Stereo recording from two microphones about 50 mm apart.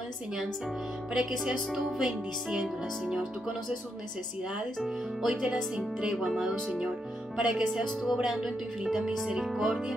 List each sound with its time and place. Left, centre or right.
1.1 s speech: centre
4.8 s speech: centre
6.1 s speech: centre
7.8 s speech: centre
8.2 s speech: centre